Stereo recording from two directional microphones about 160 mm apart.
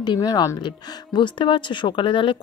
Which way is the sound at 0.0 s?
25° left (ahead or behind).